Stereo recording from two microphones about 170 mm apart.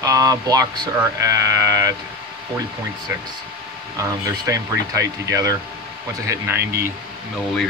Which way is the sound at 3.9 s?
20° right (ahead or behind).